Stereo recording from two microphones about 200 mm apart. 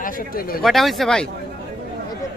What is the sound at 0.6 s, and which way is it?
Speech, centre (ahead or behind).